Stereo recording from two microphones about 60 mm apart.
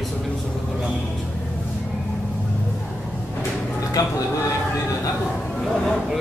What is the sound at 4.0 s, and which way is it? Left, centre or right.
Speech, left.